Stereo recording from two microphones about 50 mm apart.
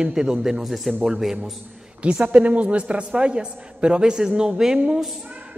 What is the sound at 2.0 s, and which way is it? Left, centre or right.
A man's voice, right.